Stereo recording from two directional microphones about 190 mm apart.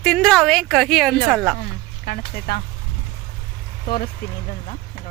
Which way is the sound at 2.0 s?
55° left (ahead or behind).